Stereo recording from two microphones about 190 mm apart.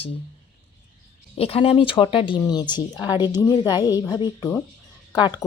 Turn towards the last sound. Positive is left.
turn(degrees=20)  # may be behind; listen again after turning